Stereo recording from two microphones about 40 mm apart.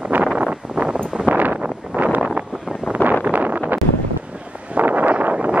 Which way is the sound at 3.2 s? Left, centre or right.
Right.